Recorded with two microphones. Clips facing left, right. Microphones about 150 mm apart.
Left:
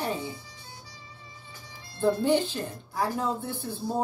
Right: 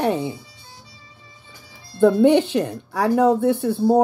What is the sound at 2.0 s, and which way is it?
A woman's voice, 70° right (ahead or behind).